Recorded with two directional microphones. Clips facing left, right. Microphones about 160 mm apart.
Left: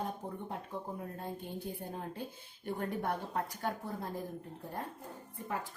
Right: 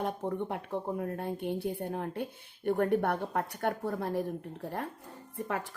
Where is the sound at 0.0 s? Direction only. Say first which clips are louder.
Right 7 dB; 75° right (ahead or behind).